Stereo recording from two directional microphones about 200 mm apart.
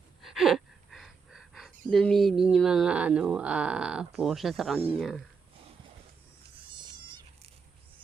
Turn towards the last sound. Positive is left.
turn(degrees=-20)  # may be behind; listen again after turning